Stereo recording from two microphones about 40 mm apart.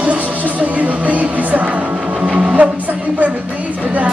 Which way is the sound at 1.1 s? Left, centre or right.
Right.